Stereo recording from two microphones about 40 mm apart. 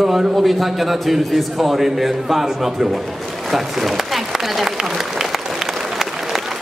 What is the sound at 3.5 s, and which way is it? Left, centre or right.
Applause, centre.